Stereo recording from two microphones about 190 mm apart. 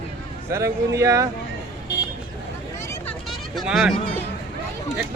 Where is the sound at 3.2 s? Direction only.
Centre (ahead or behind).